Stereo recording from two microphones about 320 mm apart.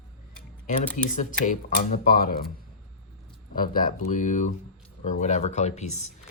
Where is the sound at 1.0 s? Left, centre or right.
Left.